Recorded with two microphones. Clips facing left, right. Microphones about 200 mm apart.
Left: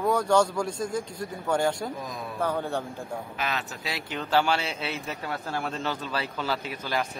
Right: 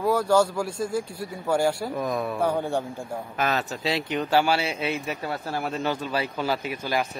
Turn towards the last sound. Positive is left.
turn(degrees=-10)  # may be behind; listen again after turning